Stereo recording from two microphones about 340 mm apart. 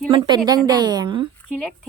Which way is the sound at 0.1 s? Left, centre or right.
Centre.